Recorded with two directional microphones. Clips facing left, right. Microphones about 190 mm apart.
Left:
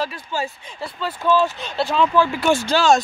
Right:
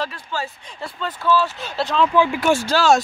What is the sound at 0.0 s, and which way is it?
Speech, 15° left (ahead or behind).